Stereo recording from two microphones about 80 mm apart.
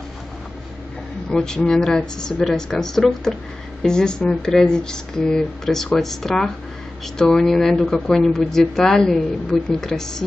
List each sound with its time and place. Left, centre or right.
1.3 s a woman's voice: centre